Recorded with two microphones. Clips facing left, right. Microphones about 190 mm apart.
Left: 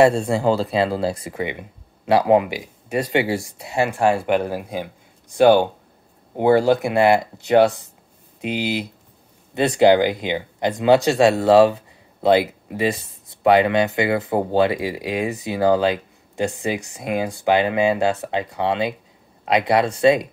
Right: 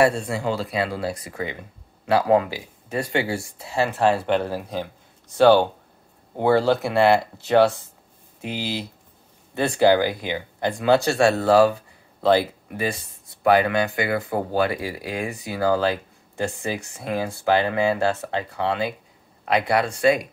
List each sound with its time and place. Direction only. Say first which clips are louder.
0.0 s speech: left 5 dB; 30° left (ahead or behind)